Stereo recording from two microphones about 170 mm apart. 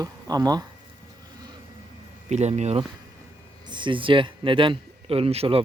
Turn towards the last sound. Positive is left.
turn(degrees=-35)  # may be behind; listen again after turning